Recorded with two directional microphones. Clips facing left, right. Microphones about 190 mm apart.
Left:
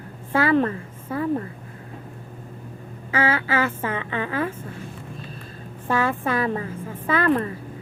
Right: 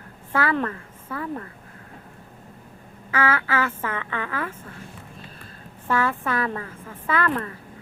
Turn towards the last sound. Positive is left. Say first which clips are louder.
# left 4 dB
turn(degrees=20)  # may be behind; listen again after turning